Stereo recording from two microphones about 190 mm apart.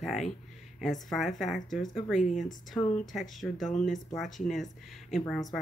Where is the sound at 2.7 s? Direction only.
5° left (ahead or behind).